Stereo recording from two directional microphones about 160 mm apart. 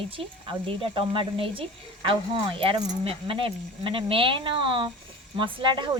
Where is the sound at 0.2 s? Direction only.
35° right (ahead or behind).